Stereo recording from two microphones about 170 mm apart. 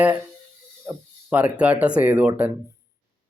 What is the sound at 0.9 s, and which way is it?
Speech, 10° right (ahead or behind).